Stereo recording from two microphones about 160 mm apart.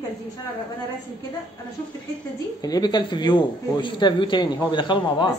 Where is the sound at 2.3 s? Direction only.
25° left (ahead or behind).